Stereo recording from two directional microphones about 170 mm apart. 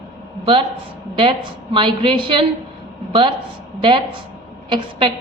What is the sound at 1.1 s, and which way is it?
A woman's voice, 30° right (ahead or behind).